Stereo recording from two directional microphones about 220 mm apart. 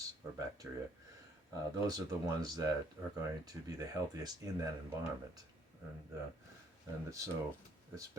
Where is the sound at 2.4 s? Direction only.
15° right (ahead or behind).